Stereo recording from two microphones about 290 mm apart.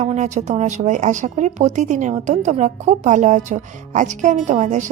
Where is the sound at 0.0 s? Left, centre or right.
Right.